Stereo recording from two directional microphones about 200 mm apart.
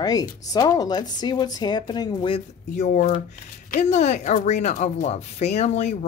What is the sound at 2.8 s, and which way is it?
Speech, 35° left (ahead or behind).